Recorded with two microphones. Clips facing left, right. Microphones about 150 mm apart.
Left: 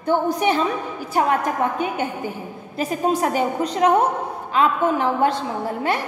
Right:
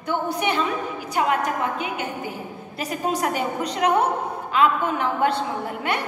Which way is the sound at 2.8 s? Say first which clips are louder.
Left 4 dB; 40° left (ahead or behind).